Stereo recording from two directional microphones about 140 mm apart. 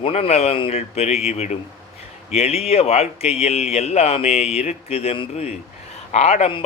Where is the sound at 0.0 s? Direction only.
45° left (ahead or behind).